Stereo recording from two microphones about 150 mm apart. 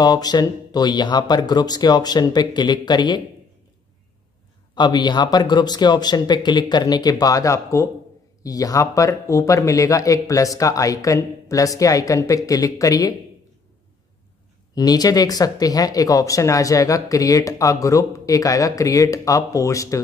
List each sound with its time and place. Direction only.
0.0 s speech: 25° left (ahead or behind)
4.7 s speech: 30° left (ahead or behind)
14.8 s speech: 25° left (ahead or behind)